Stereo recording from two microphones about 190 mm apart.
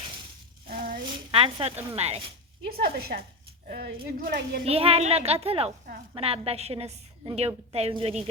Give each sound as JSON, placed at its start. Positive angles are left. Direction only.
{"t": 0.7, "sound": "a sound", "side_deg": -50}
{"t": 1.3, "sound": "a woman's voice", "side_deg": -30}
{"t": 2.7, "sound": "a woman's voice", "side_deg": -55}
{"t": 4.6, "sound": "a woman's voice", "side_deg": -30}